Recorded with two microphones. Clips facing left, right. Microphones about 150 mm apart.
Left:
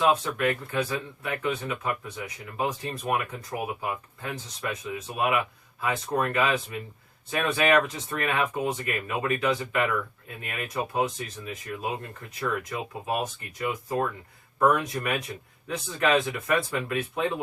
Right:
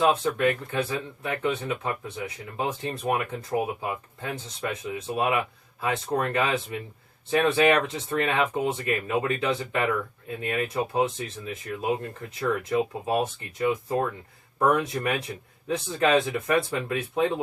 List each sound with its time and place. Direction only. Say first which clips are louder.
0.1 s speech: right 2 dB; 30° right (ahead or behind)
13.1 s speech: right 4 dB; 25° right (ahead or behind)